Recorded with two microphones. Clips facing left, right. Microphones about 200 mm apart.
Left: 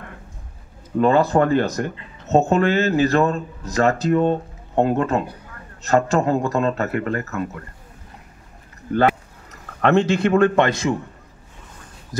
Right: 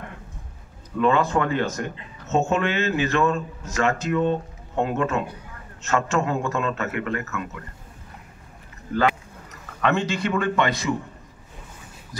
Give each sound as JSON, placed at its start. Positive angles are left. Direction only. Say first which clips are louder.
{"t": 0.9, "sound": "speech", "louder": "left 4 dB", "side_deg": 40}
{"t": 9.8, "sound": "a man's voice", "louder": "left 6 dB", "side_deg": 55}
{"t": 12.1, "sound": "a sound", "louder": "left 12 dB", "side_deg": 45}